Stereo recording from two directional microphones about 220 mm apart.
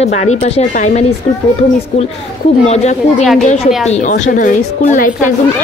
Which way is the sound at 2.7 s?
30° left (ahead or behind).